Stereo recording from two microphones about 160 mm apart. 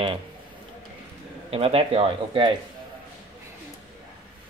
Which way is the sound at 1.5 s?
40° right (ahead or behind).